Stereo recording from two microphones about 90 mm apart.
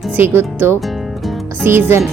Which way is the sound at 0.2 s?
25° right (ahead or behind).